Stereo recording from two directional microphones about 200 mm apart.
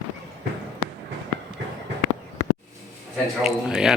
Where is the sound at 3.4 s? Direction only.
5° right (ahead or behind).